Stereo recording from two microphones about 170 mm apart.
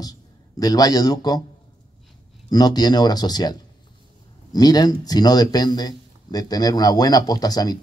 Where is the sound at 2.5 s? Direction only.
25° left (ahead or behind).